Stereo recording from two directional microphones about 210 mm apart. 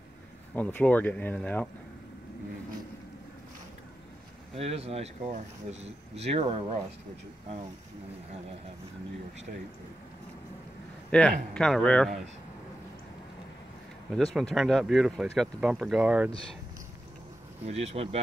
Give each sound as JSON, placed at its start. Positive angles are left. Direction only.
{"t": 0.6, "sound": "speech", "side_deg": 5}
{"t": 4.6, "sound": "speech", "side_deg": -30}
{"t": 11.1, "sound": "a man's voice", "side_deg": 5}
{"t": 14.1, "sound": "speech", "side_deg": 0}
{"t": 17.6, "sound": "speech", "side_deg": -30}